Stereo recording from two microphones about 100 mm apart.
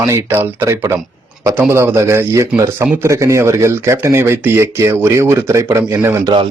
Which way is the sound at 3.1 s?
30° right (ahead or behind).